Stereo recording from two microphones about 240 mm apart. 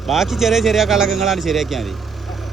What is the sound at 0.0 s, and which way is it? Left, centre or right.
Speech, centre.